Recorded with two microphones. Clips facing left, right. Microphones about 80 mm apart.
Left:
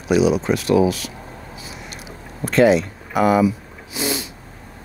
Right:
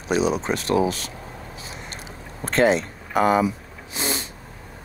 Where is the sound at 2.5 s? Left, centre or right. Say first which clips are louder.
Left 4 dB; right.